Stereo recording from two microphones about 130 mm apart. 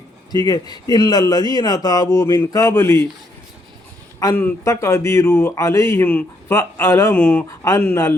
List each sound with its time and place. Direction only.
0.3 s speech: 30° left (ahead or behind)
4.4 s speech: 20° left (ahead or behind)
7.1 s speech: 10° left (ahead or behind)
7.6 s speech: 20° left (ahead or behind)